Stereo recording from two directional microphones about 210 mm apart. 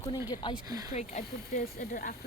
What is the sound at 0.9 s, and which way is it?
Speech, 35° left (ahead or behind).